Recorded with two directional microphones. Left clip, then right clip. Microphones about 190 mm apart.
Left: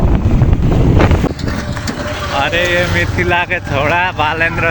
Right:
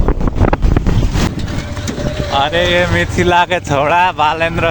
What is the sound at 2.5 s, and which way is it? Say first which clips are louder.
Speech: right 1 dB; 40° right (ahead or behind).